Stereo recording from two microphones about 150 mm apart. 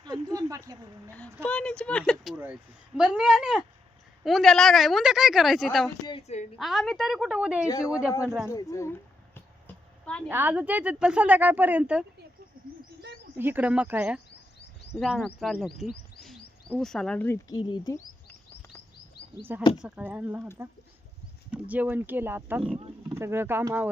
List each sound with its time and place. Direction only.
0.0 s speech: 30° right (ahead or behind)
1.4 s a woman's voice: 10° left (ahead or behind)
6.2 s a woman's voice: 50° left (ahead or behind)
6.6 s a woman's voice: centre (ahead or behind)
7.7 s speech: 20° left (ahead or behind)
8.4 s a sound: 20° left (ahead or behind)
10.2 s speech: 10° right (ahead or behind)
13.3 s speech: 15° right (ahead or behind)
14.9 s a woman's voice: 5° left (ahead or behind)
17.5 s speech: 30° left (ahead or behind)
19.8 s speech: 10° right (ahead or behind)
21.5 s speech: 10° right (ahead or behind)
22.7 s wild animals: 10° right (ahead or behind)
23.2 s speech: 15° right (ahead or behind)